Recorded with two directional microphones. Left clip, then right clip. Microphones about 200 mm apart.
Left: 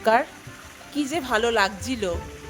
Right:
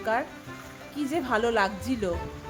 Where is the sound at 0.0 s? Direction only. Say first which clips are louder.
Left 8 dB; 40° left (ahead or behind).